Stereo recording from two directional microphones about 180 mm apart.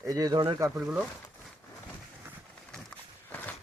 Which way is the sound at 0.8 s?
5° right (ahead or behind).